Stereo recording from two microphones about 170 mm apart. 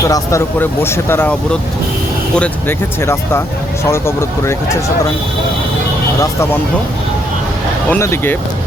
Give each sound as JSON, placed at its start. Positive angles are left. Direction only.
{"t": 0.0, "sound": "speech", "side_deg": 20}
{"t": 7.9, "sound": "speech", "side_deg": 15}